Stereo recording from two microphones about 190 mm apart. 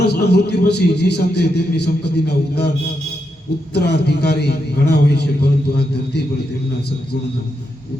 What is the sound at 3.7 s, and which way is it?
A man's voice, 60° left (ahead or behind).